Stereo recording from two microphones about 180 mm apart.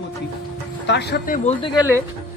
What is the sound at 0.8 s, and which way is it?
Speech, 70° left (ahead or behind).